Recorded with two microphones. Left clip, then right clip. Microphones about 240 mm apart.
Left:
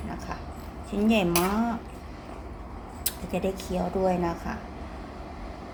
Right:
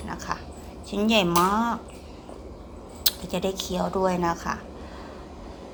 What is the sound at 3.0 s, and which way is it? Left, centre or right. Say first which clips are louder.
Speech: right 4 dB; centre.